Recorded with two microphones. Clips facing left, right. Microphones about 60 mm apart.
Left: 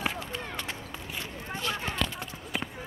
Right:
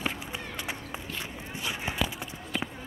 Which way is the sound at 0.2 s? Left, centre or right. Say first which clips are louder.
Left 1 dB; centre.